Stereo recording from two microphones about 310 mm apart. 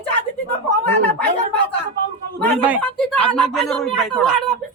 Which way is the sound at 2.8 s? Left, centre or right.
Centre.